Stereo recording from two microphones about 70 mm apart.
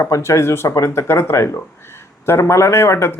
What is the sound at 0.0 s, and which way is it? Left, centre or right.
Speech, left.